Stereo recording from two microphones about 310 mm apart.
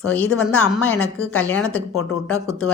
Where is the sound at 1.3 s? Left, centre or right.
Centre.